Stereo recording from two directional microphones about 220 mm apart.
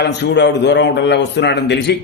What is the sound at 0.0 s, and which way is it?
A man's voice, 50° left (ahead or behind).